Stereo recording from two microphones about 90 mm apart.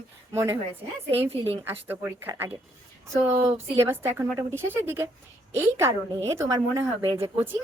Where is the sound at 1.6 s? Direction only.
25° right (ahead or behind).